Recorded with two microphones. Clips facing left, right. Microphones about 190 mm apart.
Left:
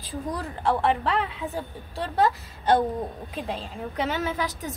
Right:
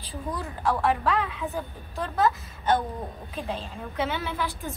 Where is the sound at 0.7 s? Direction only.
25° left (ahead or behind).